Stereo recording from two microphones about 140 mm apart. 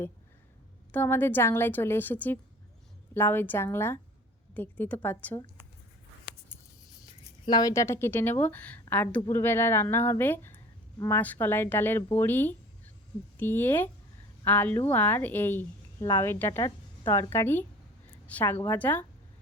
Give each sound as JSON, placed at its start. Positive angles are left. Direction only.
{"t": 0.9, "sound": "a woman's voice", "side_deg": 10}
{"t": 7.4, "sound": "a woman's voice", "side_deg": 30}
{"t": 18.1, "sound": "a sound", "side_deg": 10}
{"t": 18.6, "sound": "a woman's voice", "side_deg": 15}